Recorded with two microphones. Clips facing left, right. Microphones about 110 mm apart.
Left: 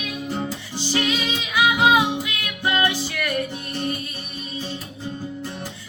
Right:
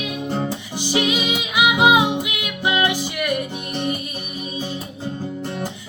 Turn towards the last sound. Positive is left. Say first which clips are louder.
# right 3 dB
turn(degrees=-20)  # may be behind; listen again after turning